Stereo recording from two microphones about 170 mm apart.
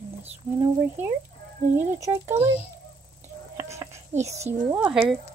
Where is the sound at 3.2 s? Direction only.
15° right (ahead or behind).